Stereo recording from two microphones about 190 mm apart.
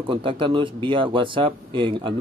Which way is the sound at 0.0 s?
25° right (ahead or behind).